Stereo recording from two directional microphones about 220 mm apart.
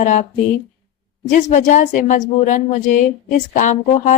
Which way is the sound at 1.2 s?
35° left (ahead or behind).